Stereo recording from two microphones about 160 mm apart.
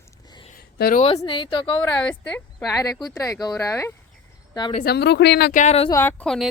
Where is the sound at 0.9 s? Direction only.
40° left (ahead or behind).